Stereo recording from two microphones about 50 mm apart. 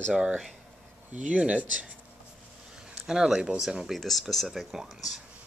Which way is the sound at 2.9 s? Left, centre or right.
Centre.